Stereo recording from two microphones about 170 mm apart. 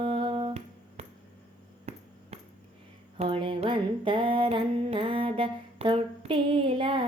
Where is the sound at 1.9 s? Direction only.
40° right (ahead or behind).